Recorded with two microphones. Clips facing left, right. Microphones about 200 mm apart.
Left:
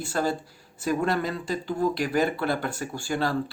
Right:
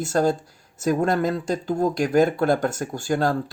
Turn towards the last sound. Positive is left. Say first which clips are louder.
# right 5 dB
turn(degrees=-45)  # may be behind; listen again after turning